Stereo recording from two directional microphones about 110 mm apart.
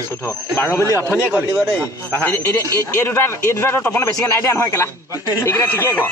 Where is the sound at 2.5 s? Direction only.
30° left (ahead or behind).